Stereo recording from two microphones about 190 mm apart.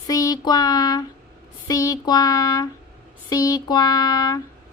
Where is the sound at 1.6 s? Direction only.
20° left (ahead or behind).